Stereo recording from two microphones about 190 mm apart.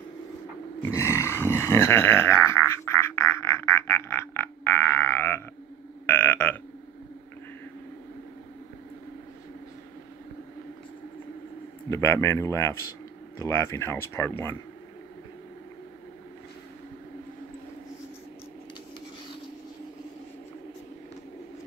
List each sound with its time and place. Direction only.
0.8 s a sound: 15° left (ahead or behind)
6.0 s burping: 10° left (ahead or behind)
11.9 s speech: 15° left (ahead or behind)